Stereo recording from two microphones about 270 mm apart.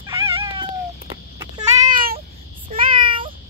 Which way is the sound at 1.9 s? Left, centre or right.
Right.